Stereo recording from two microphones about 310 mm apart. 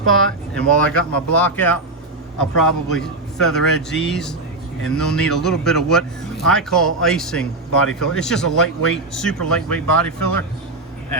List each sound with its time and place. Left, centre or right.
0.1 s speech: centre
10.2 s speech: left